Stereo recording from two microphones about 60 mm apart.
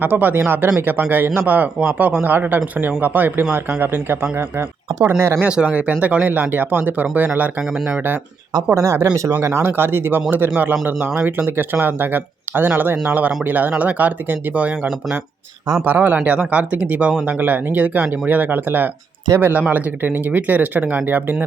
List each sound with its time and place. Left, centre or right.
0.0 s speech: right
5.4 s speech: centre; by 8.2 s right
8.7 s speech: right
9.6 s speech: right
15.8 s speech: right